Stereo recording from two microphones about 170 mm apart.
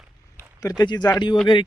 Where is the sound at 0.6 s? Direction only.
20° left (ahead or behind).